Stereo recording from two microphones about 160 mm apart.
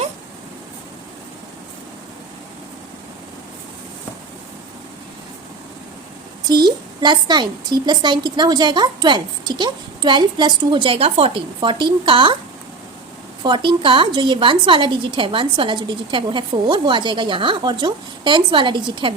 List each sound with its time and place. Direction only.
6.5 s a woman's voice: 25° right (ahead or behind)
13.4 s a woman's voice: 30° right (ahead or behind)